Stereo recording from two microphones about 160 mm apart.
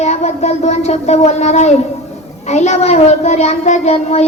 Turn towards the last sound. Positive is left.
turn(degrees=40)  # may be behind; listen again after turning